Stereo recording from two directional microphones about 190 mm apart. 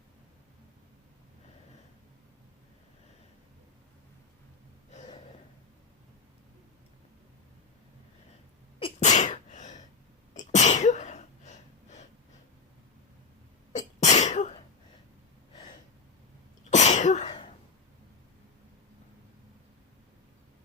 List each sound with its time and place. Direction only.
4.9 s a sound: 35° left (ahead or behind)
8.8 s sneeze: 40° left (ahead or behind)
13.7 s sneeze: 40° left (ahead or behind)
16.6 s cough: 40° left (ahead or behind)